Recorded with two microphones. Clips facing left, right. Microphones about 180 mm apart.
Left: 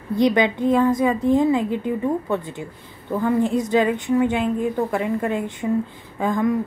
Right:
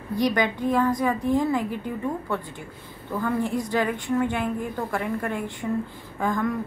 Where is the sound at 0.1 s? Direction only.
20° left (ahead or behind).